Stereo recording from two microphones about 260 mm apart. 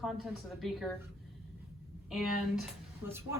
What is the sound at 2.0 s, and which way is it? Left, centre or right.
Speech, centre.